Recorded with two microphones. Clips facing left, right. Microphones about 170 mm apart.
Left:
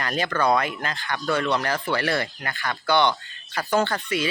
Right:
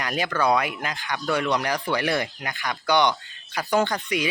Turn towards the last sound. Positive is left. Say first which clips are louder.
# even
turn(degrees=-15)  # may be behind; listen again after turning